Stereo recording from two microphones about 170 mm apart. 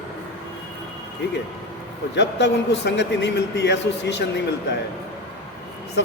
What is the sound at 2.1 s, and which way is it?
Speech, 90° left.